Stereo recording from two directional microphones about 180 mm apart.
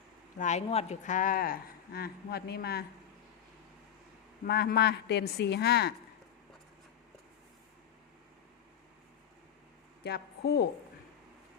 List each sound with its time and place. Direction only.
0.3 s speech: 40° left (ahead or behind); by 2.8 s 60° left (ahead or behind)
4.4 s a woman's voice: 60° left (ahead or behind)
10.0 s a woman's voice: 65° left (ahead or behind)